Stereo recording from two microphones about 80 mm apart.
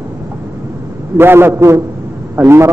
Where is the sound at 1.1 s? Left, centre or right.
Right.